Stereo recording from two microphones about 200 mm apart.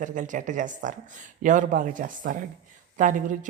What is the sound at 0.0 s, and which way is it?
A woman's voice, 40° right (ahead or behind).